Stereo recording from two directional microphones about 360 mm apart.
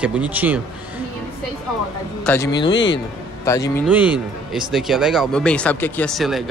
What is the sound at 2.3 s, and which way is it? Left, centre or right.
Speech, centre.